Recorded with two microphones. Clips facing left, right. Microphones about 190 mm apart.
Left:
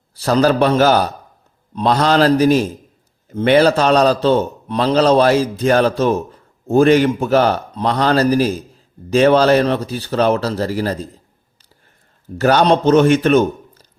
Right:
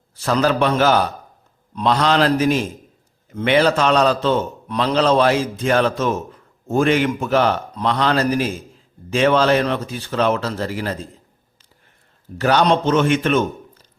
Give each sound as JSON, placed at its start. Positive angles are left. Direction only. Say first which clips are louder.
{"t": 0.1, "sound": "a man's voice", "louder": "left 4 dB", "side_deg": 35}
{"t": 12.4, "sound": "a man's voice", "louder": "left 3 dB", "side_deg": 45}